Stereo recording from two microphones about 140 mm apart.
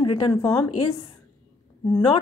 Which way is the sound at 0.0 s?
35° left (ahead or behind).